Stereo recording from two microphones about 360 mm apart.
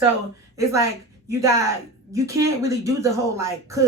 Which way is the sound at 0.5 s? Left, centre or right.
Centre.